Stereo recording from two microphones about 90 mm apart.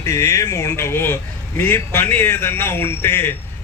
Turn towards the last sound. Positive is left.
turn(degrees=25)  # may be behind; listen again after turning